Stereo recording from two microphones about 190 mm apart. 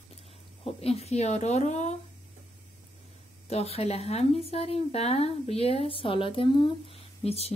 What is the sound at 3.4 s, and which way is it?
Speech, 30° left (ahead or behind).